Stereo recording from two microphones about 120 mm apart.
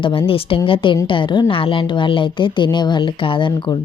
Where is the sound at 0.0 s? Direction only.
50° left (ahead or behind).